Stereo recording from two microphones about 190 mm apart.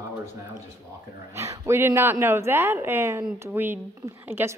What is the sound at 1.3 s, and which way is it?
Speech, 15° right (ahead or behind).